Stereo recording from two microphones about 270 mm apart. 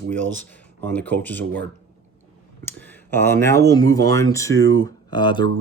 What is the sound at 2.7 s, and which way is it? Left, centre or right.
Speech, centre.